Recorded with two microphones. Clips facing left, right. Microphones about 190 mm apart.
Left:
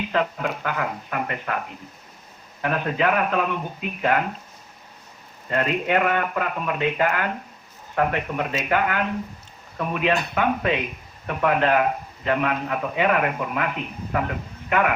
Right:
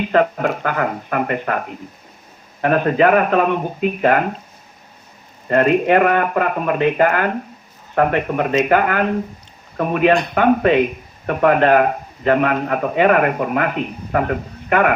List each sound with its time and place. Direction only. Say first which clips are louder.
0.1 s speech: right 9 dB; 55° right (ahead or behind)
5.5 s a man's voice: right 9 dB; 55° right (ahead or behind)